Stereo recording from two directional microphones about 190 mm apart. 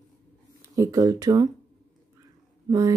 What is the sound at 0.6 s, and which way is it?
Speech, 15° right (ahead or behind).